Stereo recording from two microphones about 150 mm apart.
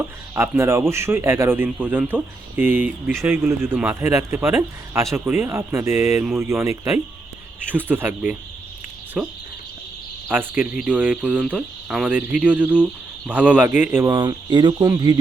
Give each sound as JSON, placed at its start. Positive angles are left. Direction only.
{"t": 0.3, "sound": "speech", "side_deg": -15}
{"t": 14.1, "sound": "speech", "side_deg": -25}